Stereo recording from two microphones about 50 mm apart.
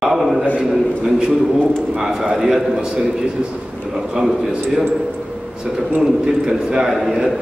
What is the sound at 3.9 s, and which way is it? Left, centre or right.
Speech, centre.